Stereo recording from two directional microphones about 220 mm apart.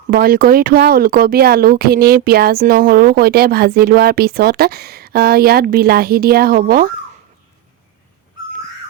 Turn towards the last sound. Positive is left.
turn(degrees=-40)  # may be behind; listen again after turning